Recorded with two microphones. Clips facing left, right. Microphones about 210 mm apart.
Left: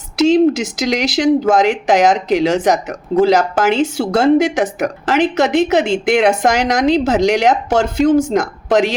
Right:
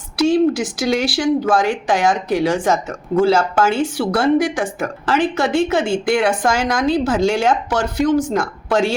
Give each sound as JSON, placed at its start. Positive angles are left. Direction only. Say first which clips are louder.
{"t": 0.2, "sound": "speech", "louder": "left 3 dB", "side_deg": 20}